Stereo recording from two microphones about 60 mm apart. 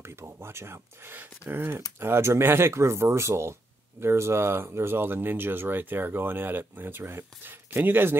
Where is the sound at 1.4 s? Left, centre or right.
Left.